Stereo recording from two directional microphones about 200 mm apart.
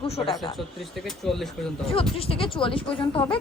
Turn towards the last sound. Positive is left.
turn(degrees=25)  # may be behind; listen again after turning